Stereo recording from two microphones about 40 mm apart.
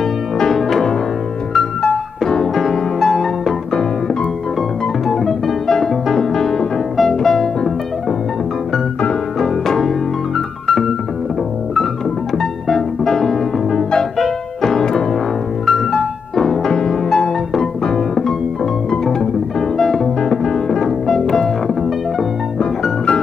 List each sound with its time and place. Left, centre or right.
0.6 s music: centre
2.4 s music: centre
5.0 s music: centre
9.4 s music: centre
12.4 s music: centre
15.6 s music: centre
16.3 s music: centre